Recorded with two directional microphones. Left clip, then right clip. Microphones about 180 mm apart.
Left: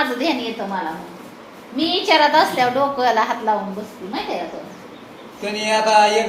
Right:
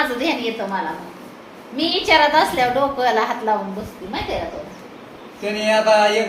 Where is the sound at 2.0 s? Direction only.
30° left (ahead or behind).